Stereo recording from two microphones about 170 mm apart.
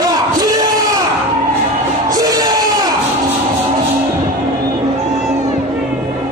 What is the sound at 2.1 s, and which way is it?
Crowd, 20° right (ahead or behind).